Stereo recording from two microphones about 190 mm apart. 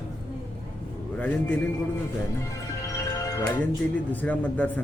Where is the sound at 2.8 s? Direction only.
20° left (ahead or behind).